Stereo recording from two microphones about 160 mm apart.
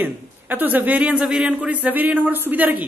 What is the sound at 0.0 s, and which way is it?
A man's voice, 10° right (ahead or behind).